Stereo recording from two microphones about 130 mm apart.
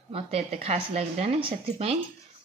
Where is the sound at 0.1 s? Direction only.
50° right (ahead or behind).